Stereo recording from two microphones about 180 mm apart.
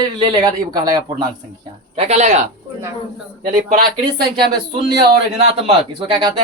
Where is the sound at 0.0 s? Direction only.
25° right (ahead or behind).